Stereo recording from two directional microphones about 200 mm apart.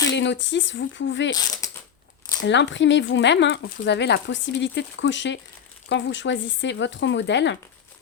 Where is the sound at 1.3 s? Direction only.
20° left (ahead or behind).